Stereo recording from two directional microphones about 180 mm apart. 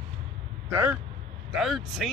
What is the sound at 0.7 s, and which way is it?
Speech, 10° right (ahead or behind).